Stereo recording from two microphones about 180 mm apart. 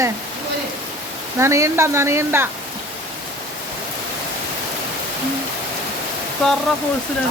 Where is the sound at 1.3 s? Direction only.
15° right (ahead or behind).